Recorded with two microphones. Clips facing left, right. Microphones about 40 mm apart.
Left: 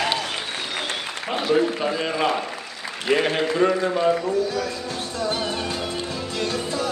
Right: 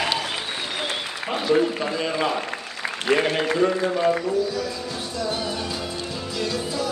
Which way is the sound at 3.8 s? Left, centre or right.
Centre.